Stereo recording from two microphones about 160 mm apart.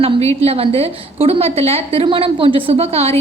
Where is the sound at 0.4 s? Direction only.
35° right (ahead or behind).